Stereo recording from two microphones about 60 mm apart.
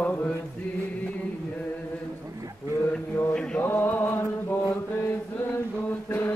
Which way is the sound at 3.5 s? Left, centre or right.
Left.